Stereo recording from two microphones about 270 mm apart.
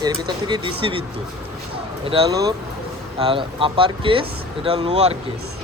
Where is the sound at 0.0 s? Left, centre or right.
Centre.